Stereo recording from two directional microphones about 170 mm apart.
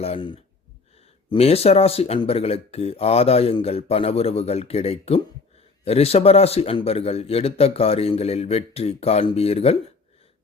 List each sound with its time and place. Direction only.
0.0 s a man's voice: 30° left (ahead or behind)